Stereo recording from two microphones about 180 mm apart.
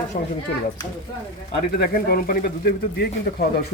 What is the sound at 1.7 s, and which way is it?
Speech, 55° left (ahead or behind).